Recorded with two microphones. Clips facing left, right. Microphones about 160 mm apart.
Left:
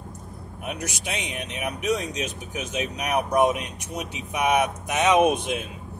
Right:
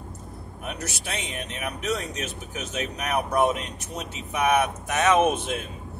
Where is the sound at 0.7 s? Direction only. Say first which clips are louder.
Left 2 dB; 15° left (ahead or behind).